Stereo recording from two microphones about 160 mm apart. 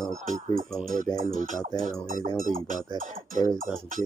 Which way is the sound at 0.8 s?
55° right (ahead or behind).